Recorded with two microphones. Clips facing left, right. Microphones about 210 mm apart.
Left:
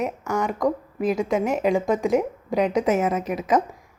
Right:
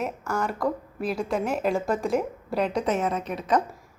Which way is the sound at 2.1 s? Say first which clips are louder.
Left 4 dB; centre (ahead or behind).